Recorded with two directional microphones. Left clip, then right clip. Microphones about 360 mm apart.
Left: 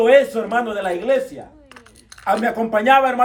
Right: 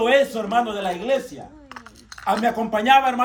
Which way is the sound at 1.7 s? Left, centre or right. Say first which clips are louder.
Right 4 dB; centre.